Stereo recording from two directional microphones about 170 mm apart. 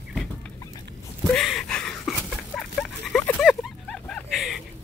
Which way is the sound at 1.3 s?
Centre (ahead or behind).